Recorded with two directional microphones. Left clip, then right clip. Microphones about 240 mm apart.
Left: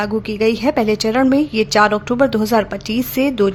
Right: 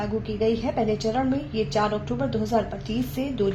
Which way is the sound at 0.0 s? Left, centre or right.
Left.